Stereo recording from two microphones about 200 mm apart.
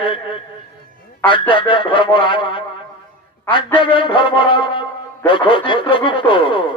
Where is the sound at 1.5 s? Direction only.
25° left (ahead or behind).